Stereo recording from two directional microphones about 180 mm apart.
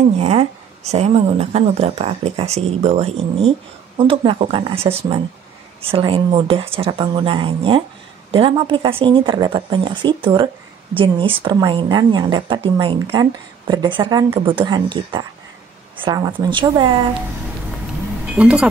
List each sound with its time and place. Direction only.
0.2 s a woman's voice: 35° right (ahead or behind)
18.3 s speech: 5° right (ahead or behind)